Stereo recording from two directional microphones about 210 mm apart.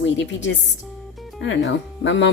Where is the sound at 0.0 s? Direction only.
60° left (ahead or behind).